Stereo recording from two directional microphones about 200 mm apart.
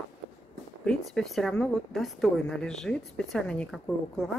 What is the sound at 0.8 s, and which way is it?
Speech, centre (ahead or behind).